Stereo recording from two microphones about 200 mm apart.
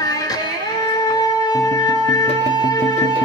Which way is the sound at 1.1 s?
20° left (ahead or behind).